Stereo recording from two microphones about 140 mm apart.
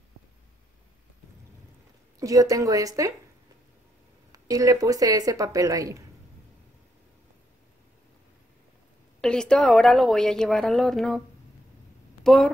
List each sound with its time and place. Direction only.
2.1 s a woman's voice: 25° right (ahead or behind)
4.3 s a woman's voice: 25° right (ahead or behind)
9.2 s a woman's voice: 5° left (ahead or behind)